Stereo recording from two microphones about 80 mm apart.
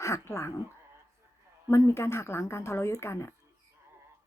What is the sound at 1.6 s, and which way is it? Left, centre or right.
A woman's voice, left.